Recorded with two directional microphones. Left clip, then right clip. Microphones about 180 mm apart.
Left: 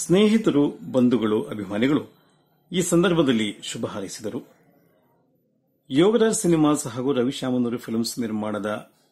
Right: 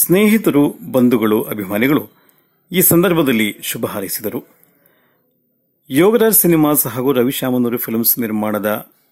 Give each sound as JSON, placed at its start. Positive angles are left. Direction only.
{"t": 0.1, "sound": "a man's voice", "side_deg": -30}
{"t": 5.9, "sound": "speech", "side_deg": -30}